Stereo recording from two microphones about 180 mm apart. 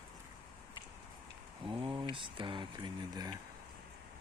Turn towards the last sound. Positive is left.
turn(degrees=-20)  # may be behind; listen again after turning